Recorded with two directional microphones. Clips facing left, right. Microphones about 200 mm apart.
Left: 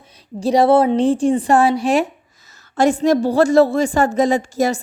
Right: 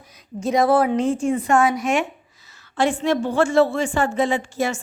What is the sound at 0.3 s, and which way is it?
A woman's voice, 35° left (ahead or behind).